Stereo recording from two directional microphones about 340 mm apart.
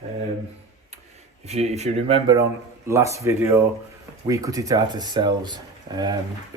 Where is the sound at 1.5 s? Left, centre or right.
Centre.